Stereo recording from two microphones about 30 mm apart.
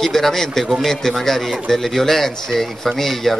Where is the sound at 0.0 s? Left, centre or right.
Centre.